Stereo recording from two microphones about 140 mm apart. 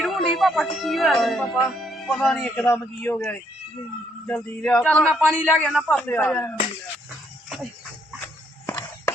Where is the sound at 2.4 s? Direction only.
15° left (ahead or behind).